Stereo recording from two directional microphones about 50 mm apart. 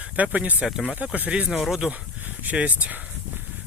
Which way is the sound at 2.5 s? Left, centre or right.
Right.